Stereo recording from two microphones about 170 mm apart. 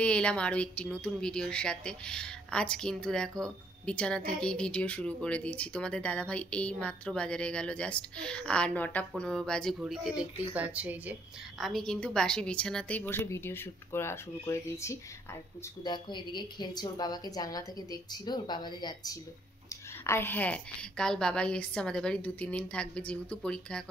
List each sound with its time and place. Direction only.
0.0 s speech: 5° left (ahead or behind)
11.6 s a woman's voice: centre (ahead or behind); by 19.1 s 25° left (ahead or behind)
20.1 s speech: 15° left (ahead or behind)